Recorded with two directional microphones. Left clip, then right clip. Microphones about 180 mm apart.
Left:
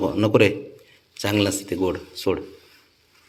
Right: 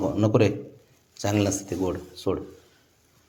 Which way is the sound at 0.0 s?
Centre (ahead or behind).